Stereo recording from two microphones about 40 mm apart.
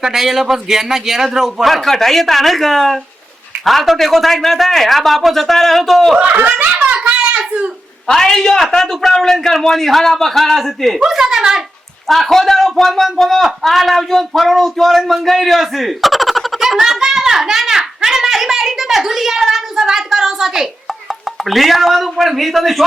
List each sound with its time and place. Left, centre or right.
0.0 s a man's voice: centre
1.6 s a man's voice: centre
6.3 s a child's voice: right
6.7 s a sound: right
8.1 s a man's voice: centre
11.1 s a sound: centre
12.0 s a man's voice: centre
21.4 s a man's voice: centre